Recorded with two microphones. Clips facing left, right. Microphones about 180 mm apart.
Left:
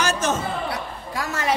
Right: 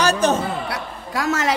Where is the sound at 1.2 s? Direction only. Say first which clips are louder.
Right 4 dB; 85° right.